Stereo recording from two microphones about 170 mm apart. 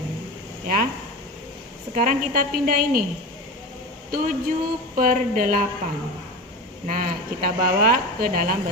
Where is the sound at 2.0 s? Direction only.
55° right (ahead or behind).